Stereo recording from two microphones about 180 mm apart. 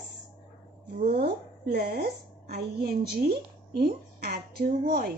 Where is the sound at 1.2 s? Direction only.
65° right (ahead or behind).